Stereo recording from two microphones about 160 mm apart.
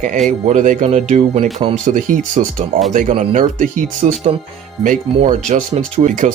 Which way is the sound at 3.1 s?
40° right (ahead or behind).